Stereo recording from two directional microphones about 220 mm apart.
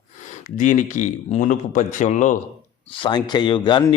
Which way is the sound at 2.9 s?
20° left (ahead or behind).